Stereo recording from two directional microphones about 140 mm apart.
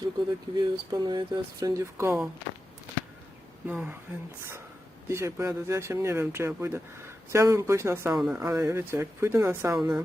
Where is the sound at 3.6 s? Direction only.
10° right (ahead or behind).